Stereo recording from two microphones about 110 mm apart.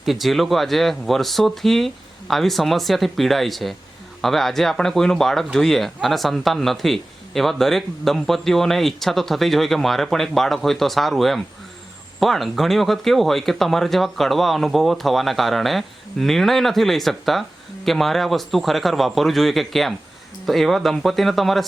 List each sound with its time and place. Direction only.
0.0 s speech: centre (ahead or behind)